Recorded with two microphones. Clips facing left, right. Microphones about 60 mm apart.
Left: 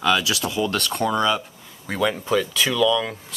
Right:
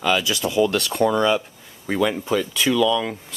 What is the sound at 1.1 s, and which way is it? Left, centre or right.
Speech, right.